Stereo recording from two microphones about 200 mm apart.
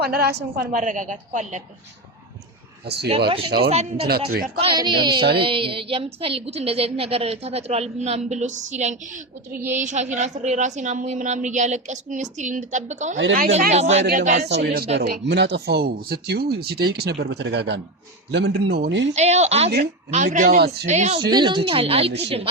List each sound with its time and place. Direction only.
0.0 s a woman's voice: 50° right (ahead or behind)
2.8 s speech: 55° right (ahead or behind)
3.2 s a woman's voice: 25° right (ahead or behind)
4.0 s speech: 50° right (ahead or behind)
4.5 s a woman's voice: 25° right (ahead or behind)
9.5 s a woman's voice: 10° right (ahead or behind)
9.7 s a woman's voice: 35° right (ahead or behind)
14.0 s a woman's voice: 45° right (ahead or behind)
14.4 s speech: 55° right (ahead or behind)
19.1 s a woman's voice: 35° right (ahead or behind)
20.8 s a woman's voice: 35° right (ahead or behind)
21.2 s a woman's voice: 20° right (ahead or behind)